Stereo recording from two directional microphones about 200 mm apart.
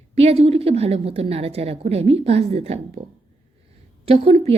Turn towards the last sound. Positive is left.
turn(degrees=-30)  # may be behind; listen again after turning